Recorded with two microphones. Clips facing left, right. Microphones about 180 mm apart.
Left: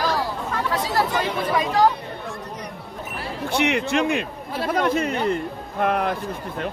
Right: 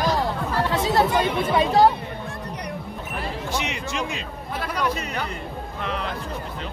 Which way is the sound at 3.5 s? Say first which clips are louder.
Left 11 dB; 60° left (ahead or behind).